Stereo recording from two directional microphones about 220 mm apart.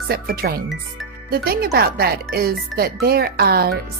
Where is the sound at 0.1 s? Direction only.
45° right (ahead or behind).